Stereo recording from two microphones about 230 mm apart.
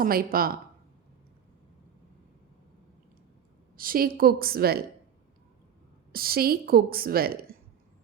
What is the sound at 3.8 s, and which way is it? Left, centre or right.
A woman's voice, right.